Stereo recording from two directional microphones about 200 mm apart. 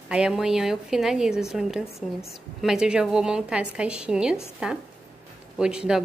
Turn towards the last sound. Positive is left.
turn(degrees=-5)  # may be behind; listen again after turning